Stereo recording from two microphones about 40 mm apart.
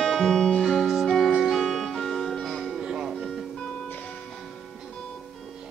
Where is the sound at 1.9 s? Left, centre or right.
Centre.